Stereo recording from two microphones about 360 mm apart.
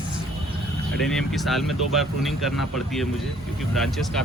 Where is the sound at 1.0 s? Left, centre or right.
Centre.